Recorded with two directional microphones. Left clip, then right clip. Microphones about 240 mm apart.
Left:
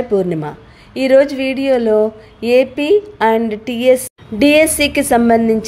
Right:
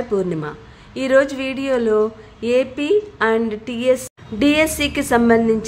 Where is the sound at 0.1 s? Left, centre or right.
Centre.